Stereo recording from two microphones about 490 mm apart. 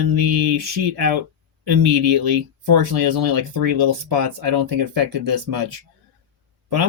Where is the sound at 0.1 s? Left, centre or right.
Right.